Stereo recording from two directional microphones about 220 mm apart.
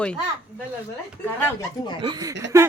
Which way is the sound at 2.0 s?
20° right (ahead or behind).